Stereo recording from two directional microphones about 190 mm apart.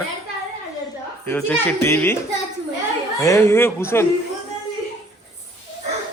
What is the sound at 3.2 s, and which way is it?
Speech, 15° left (ahead or behind).